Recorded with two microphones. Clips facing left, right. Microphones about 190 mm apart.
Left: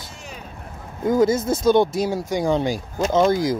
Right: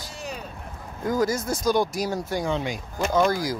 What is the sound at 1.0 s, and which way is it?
Speech, 25° left (ahead or behind).